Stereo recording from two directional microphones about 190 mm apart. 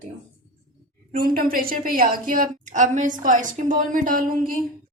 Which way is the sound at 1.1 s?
50° right (ahead or behind).